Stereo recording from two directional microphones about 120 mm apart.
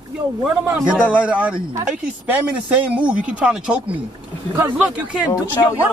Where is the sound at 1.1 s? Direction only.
10° right (ahead or behind).